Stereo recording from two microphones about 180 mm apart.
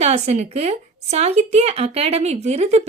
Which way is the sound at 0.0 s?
40° right (ahead or behind).